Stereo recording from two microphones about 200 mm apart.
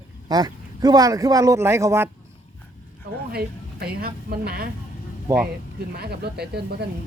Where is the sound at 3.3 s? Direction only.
50° right (ahead or behind).